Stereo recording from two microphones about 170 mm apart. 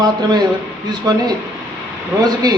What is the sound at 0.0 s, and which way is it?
A man's voice, 25° right (ahead or behind).